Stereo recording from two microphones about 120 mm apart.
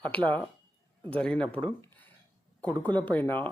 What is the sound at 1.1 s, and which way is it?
Speech, 10° left (ahead or behind).